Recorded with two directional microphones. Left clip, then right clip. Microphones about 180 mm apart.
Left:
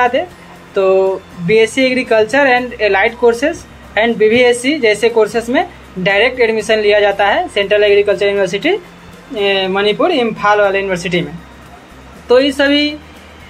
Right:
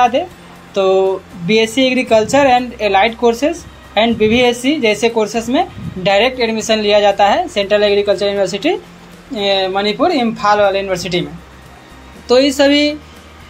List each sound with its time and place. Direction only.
0.7 s a woman's voice: 30° right (ahead or behind)
9.3 s a woman's voice: 35° right (ahead or behind)
12.3 s a woman's voice: 35° right (ahead or behind)